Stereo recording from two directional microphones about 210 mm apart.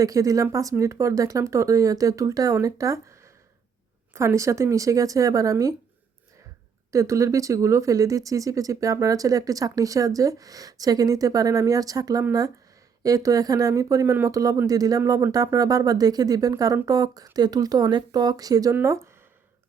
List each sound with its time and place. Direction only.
0.0 s speech: 15° right (ahead or behind)
6.9 s speech: 15° right (ahead or behind)